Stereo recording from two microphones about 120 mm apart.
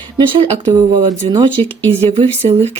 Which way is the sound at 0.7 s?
35° right (ahead or behind).